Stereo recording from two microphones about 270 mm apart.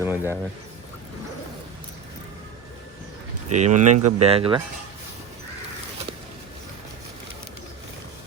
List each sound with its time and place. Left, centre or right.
0.0 s a sound: centre
3.5 s speech: right
3.8 s speech: right
4.2 s speech: right